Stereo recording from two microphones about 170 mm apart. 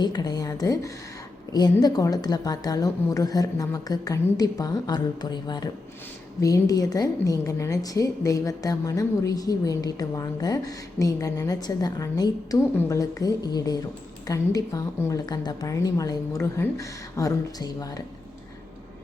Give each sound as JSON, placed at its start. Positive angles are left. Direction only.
{"t": 0.0, "sound": "a woman's voice", "side_deg": 25}